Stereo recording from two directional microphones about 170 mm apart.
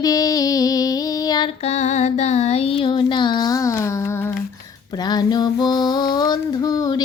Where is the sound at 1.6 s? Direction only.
40° left (ahead or behind).